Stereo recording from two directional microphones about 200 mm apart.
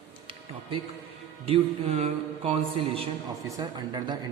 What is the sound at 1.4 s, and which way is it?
A man's voice, 30° right (ahead or behind).